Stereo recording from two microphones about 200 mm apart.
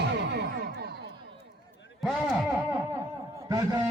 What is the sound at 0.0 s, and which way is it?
Music, 55° right (ahead or behind).